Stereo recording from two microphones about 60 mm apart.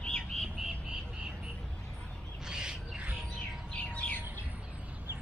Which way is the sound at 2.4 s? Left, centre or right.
Centre.